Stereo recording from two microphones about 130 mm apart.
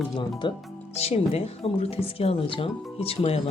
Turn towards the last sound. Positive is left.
turn(degrees=50)  # may be behind; listen again after turning